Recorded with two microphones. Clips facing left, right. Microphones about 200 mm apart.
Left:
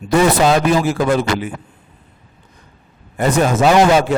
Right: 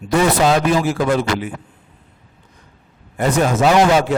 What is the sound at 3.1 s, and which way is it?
Speech, 20° left (ahead or behind).